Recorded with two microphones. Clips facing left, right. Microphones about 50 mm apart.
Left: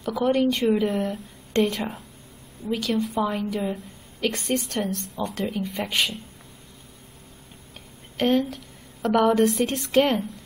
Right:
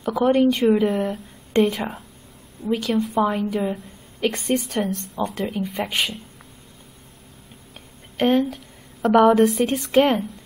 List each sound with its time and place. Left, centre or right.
0.1 s speech: centre
8.2 s speech: centre
8.5 s a sound: centre
9.3 s a woman's voice: centre